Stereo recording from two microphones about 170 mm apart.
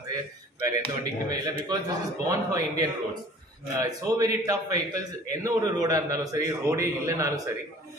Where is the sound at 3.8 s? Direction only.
20° right (ahead or behind).